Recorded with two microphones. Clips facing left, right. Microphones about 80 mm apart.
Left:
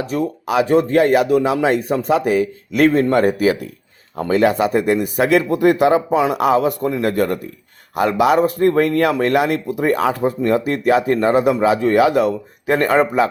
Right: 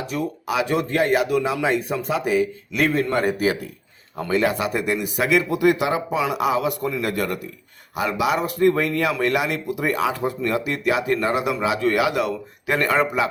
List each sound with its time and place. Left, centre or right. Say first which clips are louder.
0.0 s speech: left 5 dB; left
1.6 s speech: left 5 dB; left
6.7 s speech: left 5 dB; left
9.6 s speech: left 5 dB; left
10.2 s speech: left 6 dB; left